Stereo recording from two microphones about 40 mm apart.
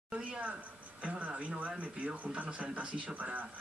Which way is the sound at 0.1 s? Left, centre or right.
Right.